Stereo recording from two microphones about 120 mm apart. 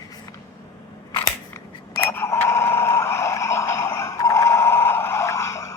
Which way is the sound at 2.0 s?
20° left (ahead or behind).